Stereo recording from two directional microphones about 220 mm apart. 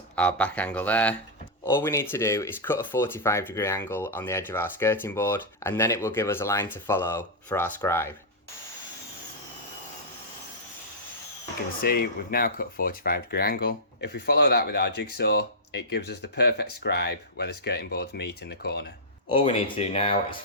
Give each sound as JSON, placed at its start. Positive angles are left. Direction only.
{"t": 0.2, "sound": "speech", "side_deg": 5}
{"t": 11.8, "sound": "speech", "side_deg": 40}
{"t": 19.3, "sound": "speech", "side_deg": 25}